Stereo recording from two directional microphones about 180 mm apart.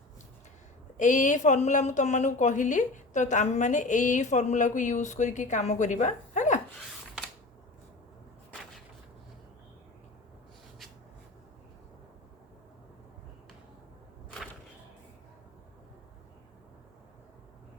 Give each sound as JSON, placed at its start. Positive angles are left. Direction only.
{"t": 0.9, "sound": "a woman's voice", "side_deg": 45}